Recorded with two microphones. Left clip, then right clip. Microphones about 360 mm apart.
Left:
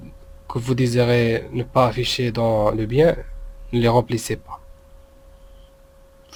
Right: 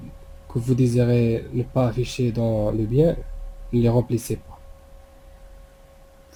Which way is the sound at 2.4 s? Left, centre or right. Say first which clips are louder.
Left 6 dB; left.